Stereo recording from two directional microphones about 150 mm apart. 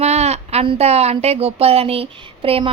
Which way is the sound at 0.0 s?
45° right (ahead or behind).